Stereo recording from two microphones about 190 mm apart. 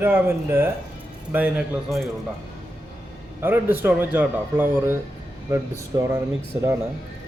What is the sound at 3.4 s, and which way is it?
Speech, 10° right (ahead or behind).